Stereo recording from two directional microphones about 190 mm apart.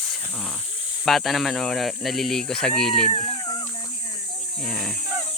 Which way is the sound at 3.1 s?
30° left (ahead or behind).